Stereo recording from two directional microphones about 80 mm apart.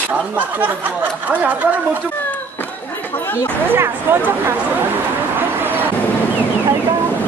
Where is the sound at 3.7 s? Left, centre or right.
Right.